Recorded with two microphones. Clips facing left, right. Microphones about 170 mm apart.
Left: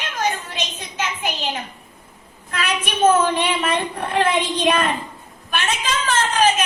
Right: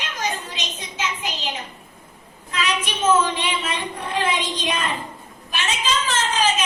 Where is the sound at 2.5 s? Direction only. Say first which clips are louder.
Left 1 dB; 55° left (ahead or behind).